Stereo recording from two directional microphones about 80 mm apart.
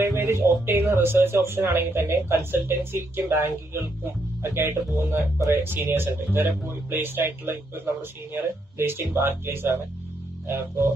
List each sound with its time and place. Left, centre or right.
0.0 s speech: right